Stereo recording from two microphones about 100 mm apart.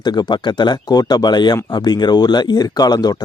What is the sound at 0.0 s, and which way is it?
Speech, 45° left (ahead or behind).